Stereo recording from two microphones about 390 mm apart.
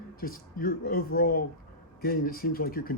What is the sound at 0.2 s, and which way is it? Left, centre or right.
Speech, left.